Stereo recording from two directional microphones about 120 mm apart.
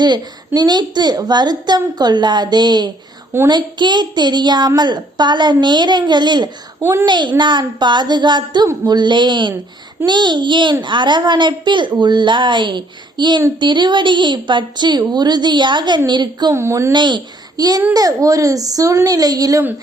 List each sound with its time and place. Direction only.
0.0 s a child's voice: 35° right (ahead or behind)
6.7 s a child's voice: 20° right (ahead or behind)
7.0 s a child's voice: 40° right (ahead or behind)
16.6 s a woman's voice: 25° right (ahead or behind)
16.9 s a child's voice: 40° right (ahead or behind)